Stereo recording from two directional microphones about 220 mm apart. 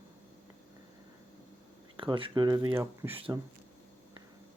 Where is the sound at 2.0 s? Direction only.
25° right (ahead or behind).